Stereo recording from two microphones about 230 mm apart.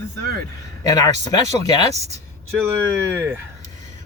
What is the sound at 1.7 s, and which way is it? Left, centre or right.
Speech, centre.